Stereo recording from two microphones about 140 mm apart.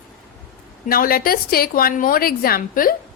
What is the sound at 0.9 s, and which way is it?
A woman's voice, 90° left.